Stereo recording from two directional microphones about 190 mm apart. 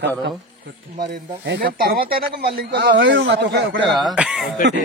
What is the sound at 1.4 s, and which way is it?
Speech, 60° right (ahead or behind).